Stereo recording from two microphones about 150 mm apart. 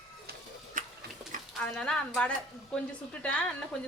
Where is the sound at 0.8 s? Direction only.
60° right (ahead or behind).